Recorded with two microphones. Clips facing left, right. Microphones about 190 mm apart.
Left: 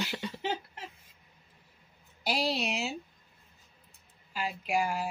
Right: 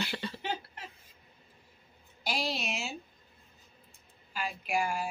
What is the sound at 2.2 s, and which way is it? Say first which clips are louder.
Speech: left 4 dB; 35° left (ahead or behind).